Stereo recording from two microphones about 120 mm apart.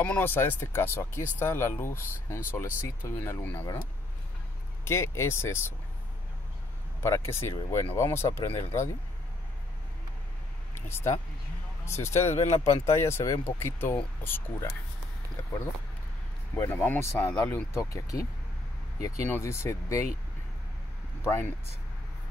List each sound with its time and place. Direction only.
0.0 s speech: 15° left (ahead or behind)
4.8 s speech: 20° left (ahead or behind)
7.0 s speech: 20° left (ahead or behind)
10.7 s speech: 20° left (ahead or behind)
12.3 s speech: 65° left (ahead or behind)
12.8 s speech: 20° left (ahead or behind)
16.5 s speech: 20° left (ahead or behind)
21.2 s speech: 20° left (ahead or behind)